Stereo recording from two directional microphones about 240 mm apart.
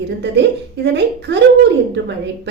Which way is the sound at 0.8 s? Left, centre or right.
Right.